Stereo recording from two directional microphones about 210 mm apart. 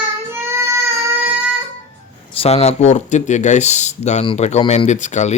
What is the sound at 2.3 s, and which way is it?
Speech, 30° left (ahead or behind).